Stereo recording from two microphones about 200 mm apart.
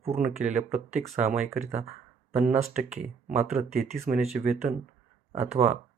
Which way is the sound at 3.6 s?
30° right (ahead or behind).